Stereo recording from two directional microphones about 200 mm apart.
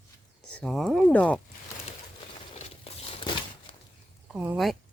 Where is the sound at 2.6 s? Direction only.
30° left (ahead or behind).